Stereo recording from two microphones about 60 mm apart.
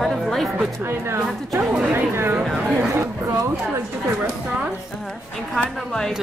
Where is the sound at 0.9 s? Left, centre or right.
Right.